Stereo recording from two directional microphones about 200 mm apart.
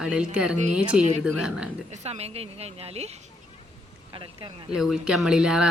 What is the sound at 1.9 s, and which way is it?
Speech, 30° right (ahead or behind).